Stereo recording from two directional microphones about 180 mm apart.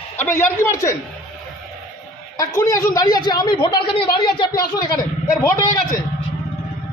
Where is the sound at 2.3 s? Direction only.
20° left (ahead or behind).